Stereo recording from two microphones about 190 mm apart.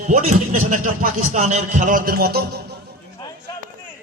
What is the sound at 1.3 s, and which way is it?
Music, 35° right (ahead or behind).